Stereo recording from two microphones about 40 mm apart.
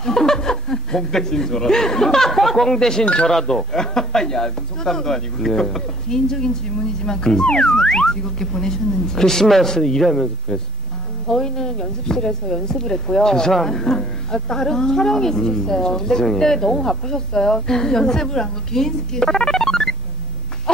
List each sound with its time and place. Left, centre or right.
0.0 s speech: centre